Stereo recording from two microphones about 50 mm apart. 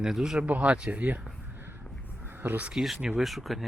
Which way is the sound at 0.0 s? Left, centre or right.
Centre.